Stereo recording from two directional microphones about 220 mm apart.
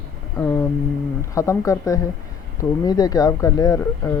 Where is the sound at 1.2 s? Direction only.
15° left (ahead or behind).